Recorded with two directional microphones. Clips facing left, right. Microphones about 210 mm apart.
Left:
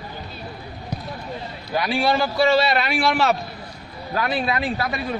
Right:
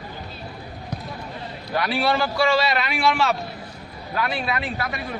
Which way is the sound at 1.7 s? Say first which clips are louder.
Left 1 dB; 15° left (ahead or behind).